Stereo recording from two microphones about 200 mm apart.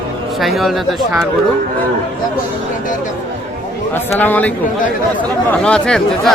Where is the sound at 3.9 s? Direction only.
10° left (ahead or behind).